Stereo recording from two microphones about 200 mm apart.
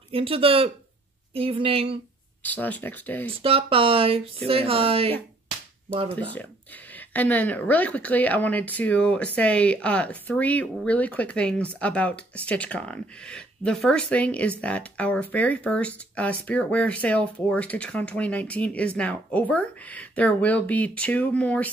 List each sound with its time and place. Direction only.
0.1 s speech: 30° right (ahead or behind)
2.4 s speech: 10° left (ahead or behind)
3.3 s speech: 30° right (ahead or behind)
6.1 s speech: 5° left (ahead or behind)